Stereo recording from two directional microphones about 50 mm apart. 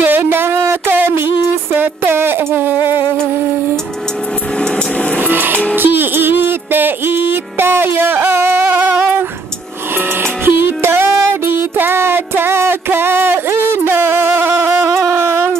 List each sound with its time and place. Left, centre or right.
0.0 s a sound: right
0.9 s music: right
5.2 s music: right
10.4 s music: right
13.8 s a sound: right
14.9 s music: right